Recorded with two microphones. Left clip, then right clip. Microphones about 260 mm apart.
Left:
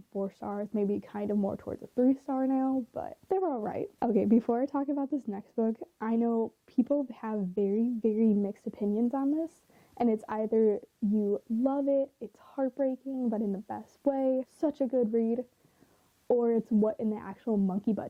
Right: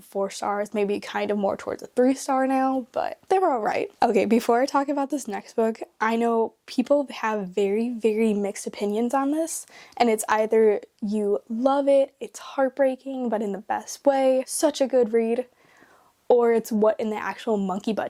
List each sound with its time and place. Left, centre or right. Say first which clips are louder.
0.3 s speech: right 10 dB; centre